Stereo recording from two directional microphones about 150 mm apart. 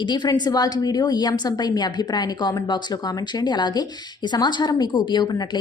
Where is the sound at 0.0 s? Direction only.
30° left (ahead or behind).